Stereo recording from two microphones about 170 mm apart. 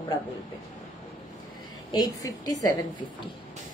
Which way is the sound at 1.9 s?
25° left (ahead or behind).